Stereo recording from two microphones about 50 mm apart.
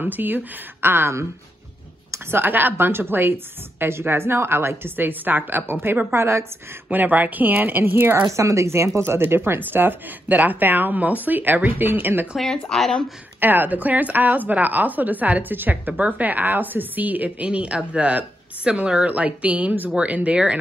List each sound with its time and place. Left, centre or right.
0.0 s a woman's voice: right
2.3 s a woman's voice: right
6.1 s a woman's voice: right
6.9 s speech: right
8.3 s speech: right
9.2 s a woman's voice: right
12.4 s speech: centre
13.4 s speech: right
17.5 s speech: right